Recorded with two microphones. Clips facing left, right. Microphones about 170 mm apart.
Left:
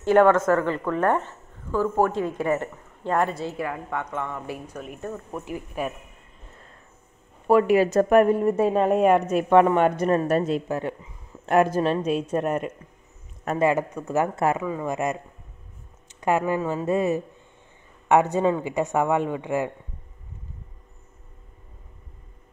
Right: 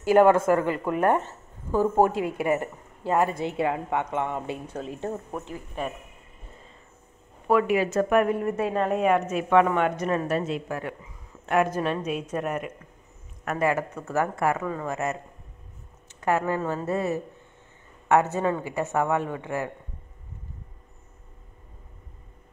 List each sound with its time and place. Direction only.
0.0 s speech: 10° right (ahead or behind); by 5.2 s 25° right (ahead or behind)
5.4 s speech: 10° left (ahead or behind)
7.4 s a woman's voice: 35° left (ahead or behind)
10.7 s a woman's voice: 25° left (ahead or behind)
14.6 s speech: 10° left (ahead or behind)
16.2 s speech: 15° left (ahead or behind)